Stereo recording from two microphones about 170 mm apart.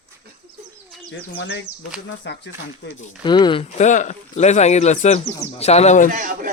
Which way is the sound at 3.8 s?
45° left (ahead or behind).